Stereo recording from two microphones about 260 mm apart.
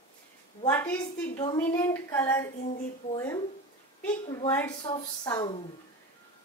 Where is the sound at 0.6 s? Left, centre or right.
Centre.